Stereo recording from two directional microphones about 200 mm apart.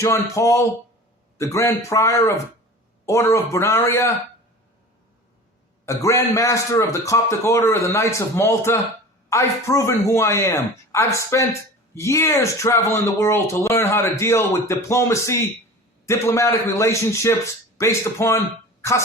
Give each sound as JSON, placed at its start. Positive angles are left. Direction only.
{"t": 0.0, "sound": "speech", "side_deg": 15}
{"t": 5.8, "sound": "speech", "side_deg": 15}